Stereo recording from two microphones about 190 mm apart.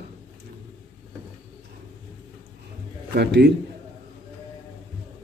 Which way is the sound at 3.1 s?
60° right (ahead or behind).